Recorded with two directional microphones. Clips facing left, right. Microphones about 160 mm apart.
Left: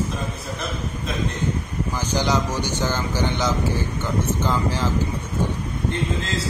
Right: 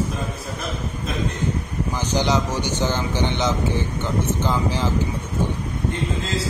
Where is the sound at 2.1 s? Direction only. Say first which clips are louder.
Right 1 dB; 15° right (ahead or behind).